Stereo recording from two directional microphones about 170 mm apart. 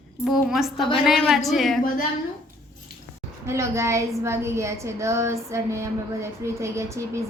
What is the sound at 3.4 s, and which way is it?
A woman's voice, 15° right (ahead or behind).